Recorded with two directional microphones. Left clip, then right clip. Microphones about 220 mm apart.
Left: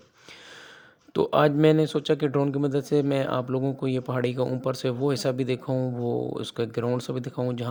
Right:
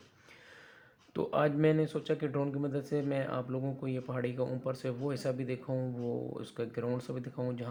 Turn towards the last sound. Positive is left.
turn(degrees=45)  # may be behind; listen again after turning